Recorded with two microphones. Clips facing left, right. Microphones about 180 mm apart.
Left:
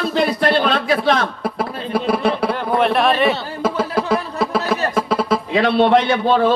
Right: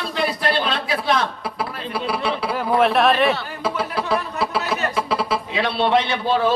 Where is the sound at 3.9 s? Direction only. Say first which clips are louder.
Left 3 dB; 45° left (ahead or behind).